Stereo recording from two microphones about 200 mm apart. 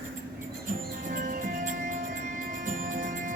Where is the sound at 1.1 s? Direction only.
40° right (ahead or behind).